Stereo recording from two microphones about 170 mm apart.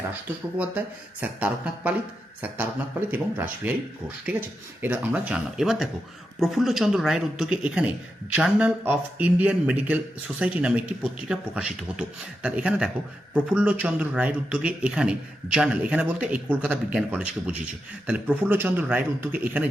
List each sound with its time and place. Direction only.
0.5 s speech: 10° right (ahead or behind)
3.1 s speech: 10° right (ahead or behind)